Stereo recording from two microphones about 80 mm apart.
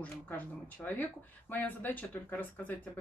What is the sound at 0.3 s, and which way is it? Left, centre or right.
A woman's voice, left.